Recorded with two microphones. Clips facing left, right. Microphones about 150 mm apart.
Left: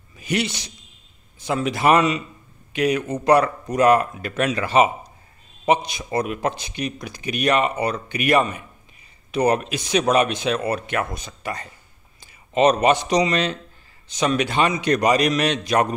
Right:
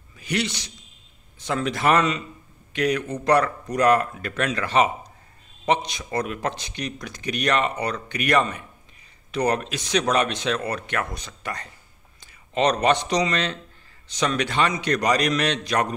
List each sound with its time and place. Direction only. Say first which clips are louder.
0.2 s a man's voice: left 2 dB; 15° left (ahead or behind)